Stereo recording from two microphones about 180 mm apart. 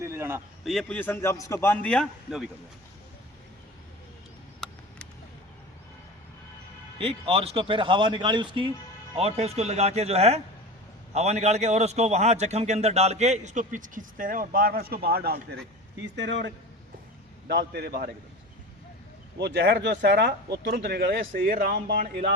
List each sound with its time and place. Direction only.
0.0 s speech: 15° right (ahead or behind)
0.6 s a man's voice: centre (ahead or behind)
4.6 s a sound: 5° left (ahead or behind)
7.0 s a man's voice: 30° right (ahead or behind); by 15.4 s 60° right (ahead or behind)
16.1 s a man's voice: 80° right
17.5 s speech: 65° right (ahead or behind)
19.4 s speech: 65° right (ahead or behind)